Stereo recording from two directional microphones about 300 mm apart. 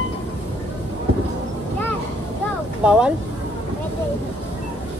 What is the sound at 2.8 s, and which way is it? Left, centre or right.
Speech, centre.